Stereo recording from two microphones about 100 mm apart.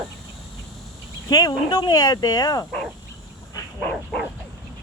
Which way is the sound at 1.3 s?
40° left (ahead or behind).